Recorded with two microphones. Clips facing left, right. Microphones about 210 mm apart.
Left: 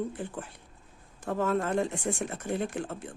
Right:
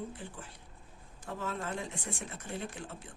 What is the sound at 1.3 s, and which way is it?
Speech, 55° left (ahead or behind).